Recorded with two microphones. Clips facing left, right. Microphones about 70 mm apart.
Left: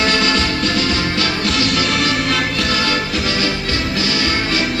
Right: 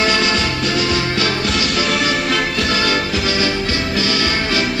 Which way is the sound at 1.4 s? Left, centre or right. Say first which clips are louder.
Left 1 dB; centre.